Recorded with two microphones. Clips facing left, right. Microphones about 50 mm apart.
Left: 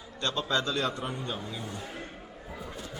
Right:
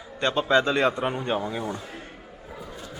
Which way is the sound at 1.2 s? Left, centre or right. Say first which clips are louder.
Right 9 dB; right.